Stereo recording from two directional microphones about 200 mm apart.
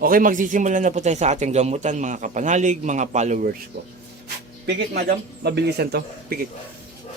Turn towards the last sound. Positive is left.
turn(degrees=-55)  # may be behind; listen again after turning